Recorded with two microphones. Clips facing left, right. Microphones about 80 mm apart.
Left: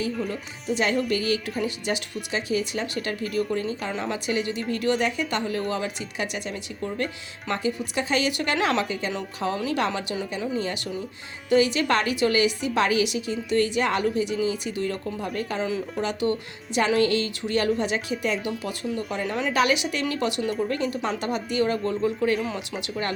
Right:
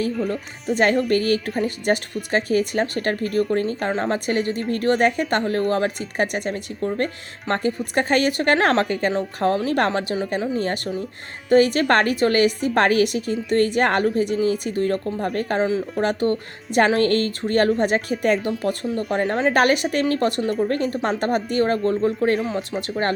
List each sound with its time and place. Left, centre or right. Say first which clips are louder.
1.0 s a woman's voice: right 5 dB; right